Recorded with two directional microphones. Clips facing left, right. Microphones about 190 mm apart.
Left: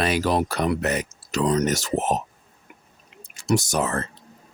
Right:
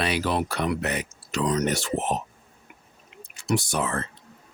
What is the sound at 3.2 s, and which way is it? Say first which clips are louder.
Speech: left 3 dB; 40° left (ahead or behind).